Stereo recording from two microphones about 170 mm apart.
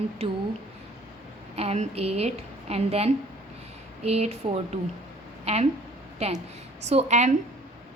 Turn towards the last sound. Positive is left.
turn(degrees=-45)  # may be behind; listen again after turning